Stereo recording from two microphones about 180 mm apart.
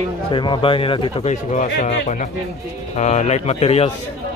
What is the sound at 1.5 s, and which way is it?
Speech, 40° left (ahead or behind).